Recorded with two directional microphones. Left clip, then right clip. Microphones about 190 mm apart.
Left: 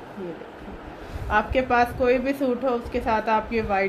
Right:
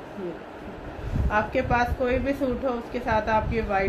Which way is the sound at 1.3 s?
50° left (ahead or behind).